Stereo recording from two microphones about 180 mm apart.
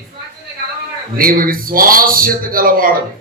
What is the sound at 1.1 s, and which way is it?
Speech, 50° right (ahead or behind).